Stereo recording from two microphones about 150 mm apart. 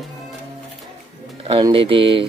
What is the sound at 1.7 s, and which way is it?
Speech, 35° right (ahead or behind).